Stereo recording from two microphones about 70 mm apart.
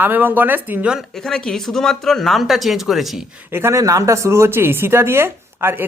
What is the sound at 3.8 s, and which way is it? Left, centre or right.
Speech, right.